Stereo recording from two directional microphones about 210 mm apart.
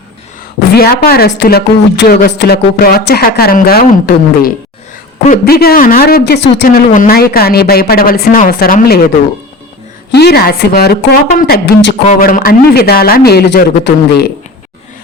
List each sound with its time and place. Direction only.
0.7 s a woman's voice: 45° left (ahead or behind)
10.2 s a woman's voice: 50° left (ahead or behind)
12.0 s a woman's voice: 40° left (ahead or behind)